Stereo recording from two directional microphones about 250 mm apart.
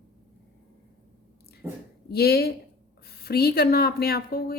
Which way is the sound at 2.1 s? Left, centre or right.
Left.